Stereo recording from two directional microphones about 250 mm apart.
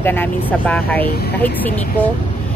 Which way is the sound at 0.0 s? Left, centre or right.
Centre.